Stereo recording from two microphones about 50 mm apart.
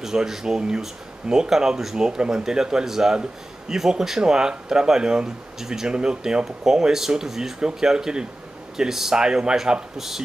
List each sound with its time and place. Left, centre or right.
0.0 s speech: centre